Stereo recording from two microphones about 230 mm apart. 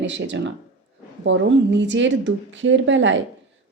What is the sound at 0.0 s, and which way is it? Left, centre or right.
A woman's voice, right.